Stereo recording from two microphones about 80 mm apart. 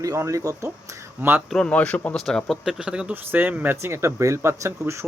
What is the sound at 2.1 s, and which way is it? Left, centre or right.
Speech, centre.